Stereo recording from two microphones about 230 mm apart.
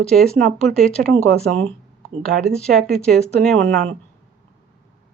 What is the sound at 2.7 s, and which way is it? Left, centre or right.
Speech, centre.